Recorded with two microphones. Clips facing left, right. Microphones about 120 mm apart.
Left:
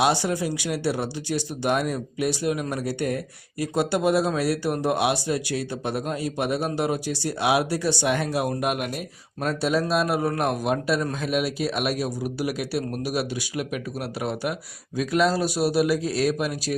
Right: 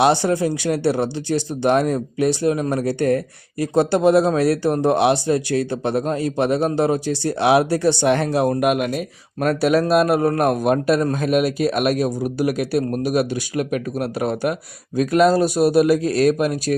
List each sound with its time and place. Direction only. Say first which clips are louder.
0.0 s a man's voice: right 6 dB; 55° right (ahead or behind)
8.6 s speech: right 7 dB; 90° right
9.4 s a man's voice: right 7 dB; 70° right (ahead or behind); by 16.7 s 50° right (ahead or behind)